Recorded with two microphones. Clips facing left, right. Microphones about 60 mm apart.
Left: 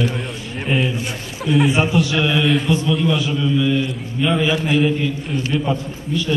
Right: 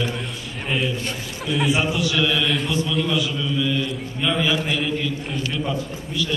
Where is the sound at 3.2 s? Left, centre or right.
Left.